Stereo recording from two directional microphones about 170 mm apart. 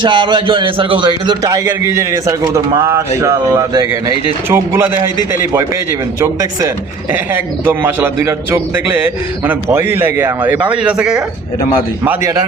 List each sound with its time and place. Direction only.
0.0 s a man's voice: 30° right (ahead or behind)
6.1 s a man's voice: 20° right (ahead or behind)
12.0 s a man's voice: 15° right (ahead or behind)